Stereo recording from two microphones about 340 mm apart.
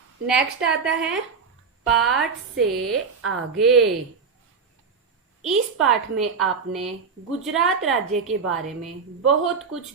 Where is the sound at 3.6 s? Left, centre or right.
Centre.